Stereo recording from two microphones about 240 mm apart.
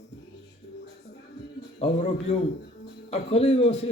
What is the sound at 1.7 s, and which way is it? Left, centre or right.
A man's voice, left.